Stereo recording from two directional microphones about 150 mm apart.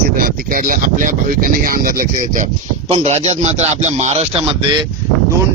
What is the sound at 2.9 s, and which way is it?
A man's voice, 45° right (ahead or behind).